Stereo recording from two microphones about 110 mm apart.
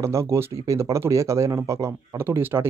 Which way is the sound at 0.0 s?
25° right (ahead or behind).